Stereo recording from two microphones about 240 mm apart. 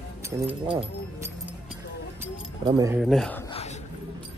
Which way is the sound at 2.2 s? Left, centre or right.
Centre.